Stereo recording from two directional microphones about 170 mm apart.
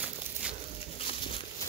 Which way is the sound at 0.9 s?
30° left (ahead or behind).